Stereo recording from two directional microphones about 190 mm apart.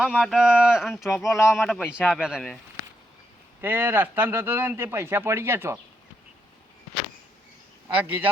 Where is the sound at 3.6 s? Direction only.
10° right (ahead or behind).